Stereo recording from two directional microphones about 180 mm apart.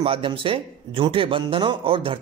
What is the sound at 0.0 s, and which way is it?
A man's voice, 30° right (ahead or behind).